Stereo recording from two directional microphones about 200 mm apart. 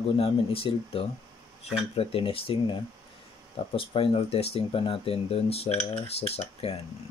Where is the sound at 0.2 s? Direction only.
30° left (ahead or behind).